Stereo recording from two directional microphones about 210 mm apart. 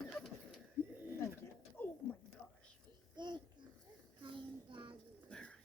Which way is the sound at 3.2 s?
20° right (ahead or behind).